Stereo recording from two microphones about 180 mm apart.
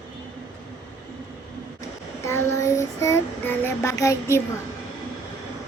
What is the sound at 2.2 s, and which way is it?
Child singing, 15° left (ahead or behind).